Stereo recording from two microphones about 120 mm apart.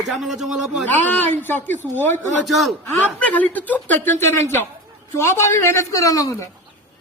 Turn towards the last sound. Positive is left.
turn(degrees=30)  # may be behind; listen again after turning